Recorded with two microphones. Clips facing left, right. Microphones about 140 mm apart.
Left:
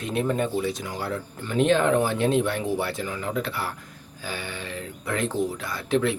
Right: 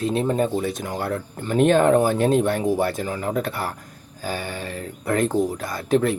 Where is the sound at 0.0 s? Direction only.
30° right (ahead or behind).